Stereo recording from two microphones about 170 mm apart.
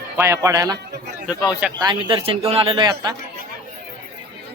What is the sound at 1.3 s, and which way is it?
Speech, 5° right (ahead or behind).